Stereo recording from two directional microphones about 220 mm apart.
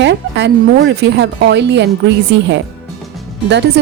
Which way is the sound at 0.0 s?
55° right (ahead or behind).